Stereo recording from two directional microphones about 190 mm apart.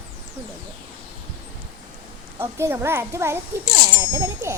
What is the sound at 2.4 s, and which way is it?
A child's voice, 15° right (ahead or behind).